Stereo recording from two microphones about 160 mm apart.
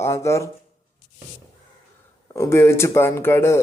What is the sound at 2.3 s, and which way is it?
Speech, 15° left (ahead or behind).